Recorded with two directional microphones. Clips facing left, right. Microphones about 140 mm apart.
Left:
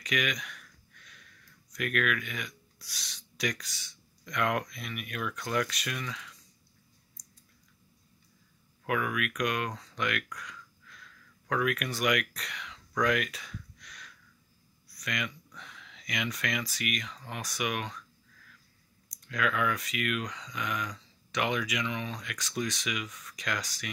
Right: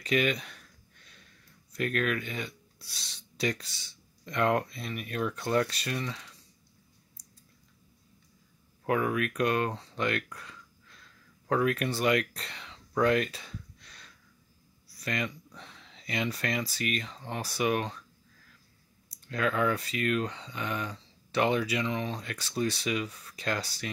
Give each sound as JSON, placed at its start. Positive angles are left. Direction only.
{"t": 0.0, "sound": "speech", "side_deg": -30}
{"t": 8.8, "sound": "a sound", "side_deg": -30}
{"t": 14.9, "sound": "speech", "side_deg": -35}
{"t": 19.2, "sound": "speech", "side_deg": -30}